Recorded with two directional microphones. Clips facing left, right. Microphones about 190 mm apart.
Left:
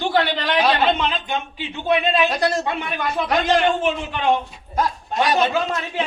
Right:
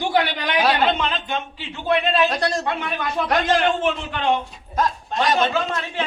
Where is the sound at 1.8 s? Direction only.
15° left (ahead or behind); by 3.6 s centre (ahead or behind).